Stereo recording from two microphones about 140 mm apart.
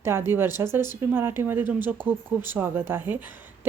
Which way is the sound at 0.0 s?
20° right (ahead or behind).